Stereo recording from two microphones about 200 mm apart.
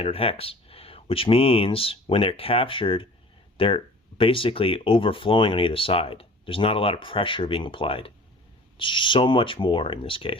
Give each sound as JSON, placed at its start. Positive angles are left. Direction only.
{"t": 0.0, "sound": "speech", "side_deg": 30}